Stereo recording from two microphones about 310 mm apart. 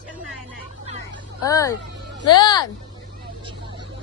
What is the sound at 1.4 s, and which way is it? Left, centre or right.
Speech, centre.